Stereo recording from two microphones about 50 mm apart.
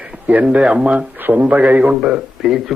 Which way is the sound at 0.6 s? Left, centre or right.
Right.